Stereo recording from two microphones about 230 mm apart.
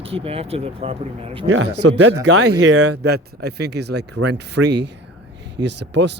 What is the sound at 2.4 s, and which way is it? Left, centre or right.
Speech, right.